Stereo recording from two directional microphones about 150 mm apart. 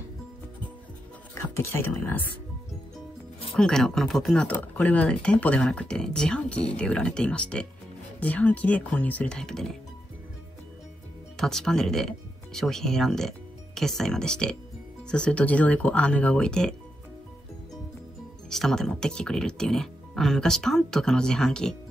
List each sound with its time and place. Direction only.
1.3 s speech: 20° left (ahead or behind)
3.5 s speech: 5° left (ahead or behind)
11.3 s speech: 5° left (ahead or behind)
18.5 s speech: centre (ahead or behind)